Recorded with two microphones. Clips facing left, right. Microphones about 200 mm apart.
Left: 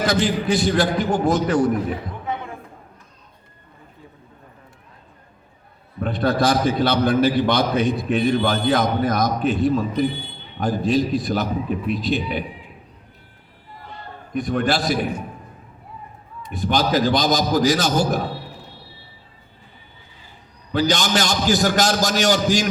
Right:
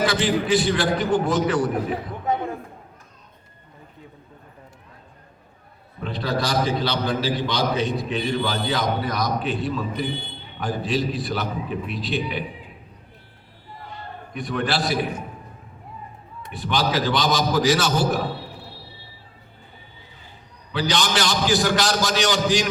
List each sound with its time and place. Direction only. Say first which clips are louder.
0.0 s a man's voice: left 1 dB; 40° left (ahead or behind)
6.0 s a man's voice: left 6 dB; 50° left (ahead or behind)
14.3 s a man's voice: left 4 dB; 40° left (ahead or behind)
16.5 s a man's voice: left 4 dB; 40° left (ahead or behind)
20.7 s a man's voice: left 3 dB; 40° left (ahead or behind)